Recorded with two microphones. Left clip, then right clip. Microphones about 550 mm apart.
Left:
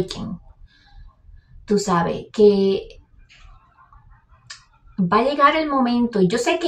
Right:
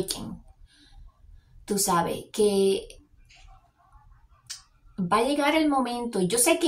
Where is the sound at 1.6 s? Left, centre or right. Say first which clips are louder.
Left 5 dB; right.